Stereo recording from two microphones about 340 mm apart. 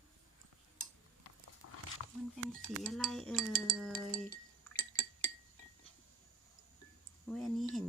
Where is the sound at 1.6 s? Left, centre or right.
Left.